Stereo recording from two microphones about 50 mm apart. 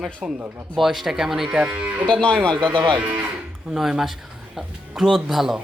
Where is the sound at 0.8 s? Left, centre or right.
Centre.